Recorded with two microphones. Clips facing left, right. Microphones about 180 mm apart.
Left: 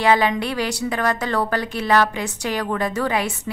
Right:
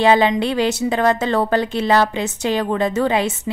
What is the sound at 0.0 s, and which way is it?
A woman's voice, 25° right (ahead or behind).